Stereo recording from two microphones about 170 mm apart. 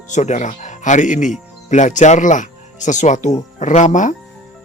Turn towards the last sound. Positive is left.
turn(degrees=45)  # may be behind; listen again after turning